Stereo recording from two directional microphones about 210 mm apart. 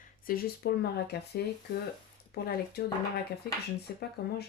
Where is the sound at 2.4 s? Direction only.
45° left (ahead or behind).